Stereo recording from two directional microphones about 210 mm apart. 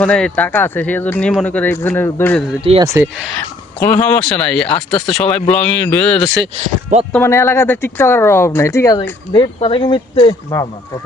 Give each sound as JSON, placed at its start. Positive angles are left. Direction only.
{"t": 0.0, "sound": "speech", "side_deg": 5}
{"t": 2.8, "sound": "speech", "side_deg": -10}
{"t": 3.8, "sound": "speech", "side_deg": 10}